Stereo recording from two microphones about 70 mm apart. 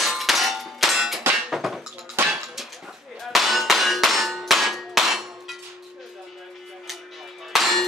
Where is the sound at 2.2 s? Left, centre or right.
Right.